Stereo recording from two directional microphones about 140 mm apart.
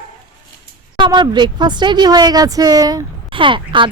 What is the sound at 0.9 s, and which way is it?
A woman's voice, 35° right (ahead or behind).